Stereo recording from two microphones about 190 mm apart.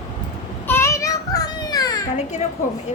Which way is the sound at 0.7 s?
15° left (ahead or behind).